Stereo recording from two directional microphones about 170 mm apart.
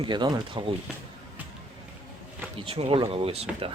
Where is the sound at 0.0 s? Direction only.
25° right (ahead or behind).